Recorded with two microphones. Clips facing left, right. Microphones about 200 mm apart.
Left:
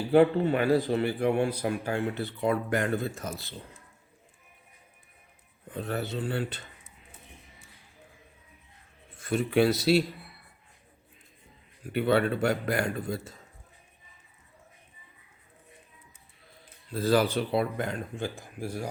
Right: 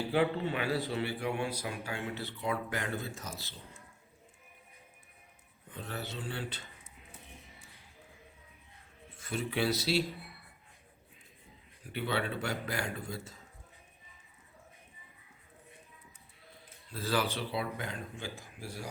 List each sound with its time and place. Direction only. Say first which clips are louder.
0.1 s a man's voice: left 11 dB; 50° left (ahead or behind)
5.7 s a man's voice: left 9 dB; 55° left (ahead or behind)
9.1 s speech: left 10 dB; 50° left (ahead or behind)
11.9 s a man's voice: left 10 dB; 50° left (ahead or behind)
16.9 s a man's voice: left 8 dB; 45° left (ahead or behind)